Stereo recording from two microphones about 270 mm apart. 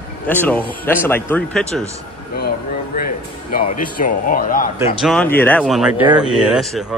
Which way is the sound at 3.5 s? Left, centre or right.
Left.